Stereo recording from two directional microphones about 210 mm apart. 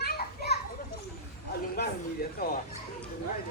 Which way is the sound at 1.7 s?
45° left (ahead or behind).